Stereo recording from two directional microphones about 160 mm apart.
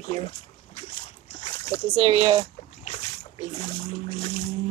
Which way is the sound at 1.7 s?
20° left (ahead or behind).